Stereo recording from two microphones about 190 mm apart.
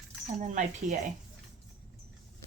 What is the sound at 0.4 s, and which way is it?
Speech, 40° right (ahead or behind).